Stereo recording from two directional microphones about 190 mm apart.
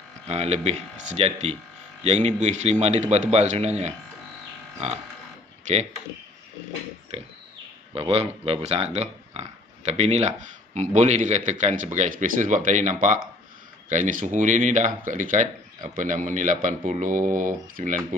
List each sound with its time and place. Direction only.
0.3 s speech: 35° right (ahead or behind)
7.1 s speech: 30° right (ahead or behind)